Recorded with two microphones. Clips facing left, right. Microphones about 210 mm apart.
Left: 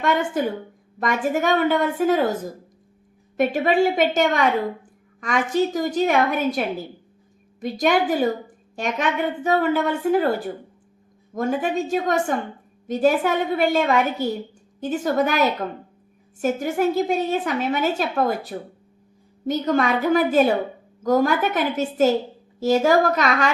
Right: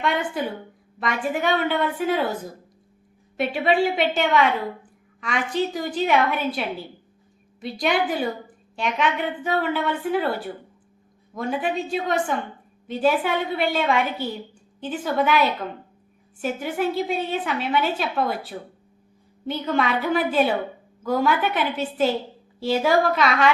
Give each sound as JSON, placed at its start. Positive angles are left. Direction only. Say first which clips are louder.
{"t": 0.0, "sound": "a woman's voice", "louder": "left 3 dB", "side_deg": 45}